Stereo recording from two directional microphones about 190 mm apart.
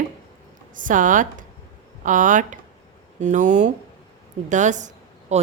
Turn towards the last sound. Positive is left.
turn(degrees=-35)  # may be behind; listen again after turning